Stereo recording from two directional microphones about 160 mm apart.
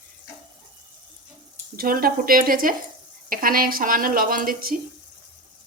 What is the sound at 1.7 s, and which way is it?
Speech, 65° right (ahead or behind).